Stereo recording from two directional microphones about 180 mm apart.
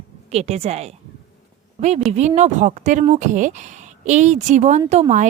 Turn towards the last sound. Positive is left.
turn(degrees=-40)  # may be behind; listen again after turning